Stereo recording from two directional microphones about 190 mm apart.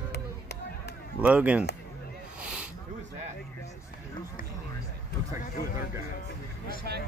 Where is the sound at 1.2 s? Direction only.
5° right (ahead or behind).